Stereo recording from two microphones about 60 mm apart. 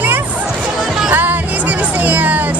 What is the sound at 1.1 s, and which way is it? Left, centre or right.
Music, right.